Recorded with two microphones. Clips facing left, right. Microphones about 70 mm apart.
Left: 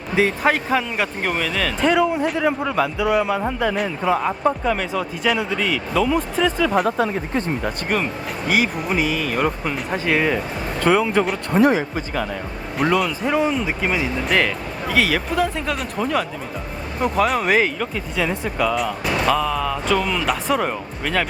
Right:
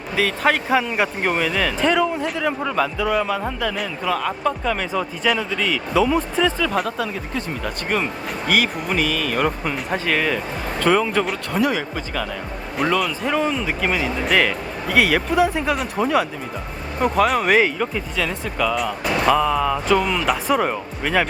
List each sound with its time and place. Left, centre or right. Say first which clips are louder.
0.4 s speech: right 1 dB; centre
1.9 s a man's voice: left 5 dB; centre; by 4.3 s left
4.3 s a man's voice: left 2 dB; centre
4.8 s speech: even; centre
6.8 s speech: left 5 dB; left
7.9 s speech: right 3 dB; centre
10.1 s a man's voice: left 3 dB; centre
12.7 s speech: left 1 dB; centre
18.2 s speech: left 2 dB; centre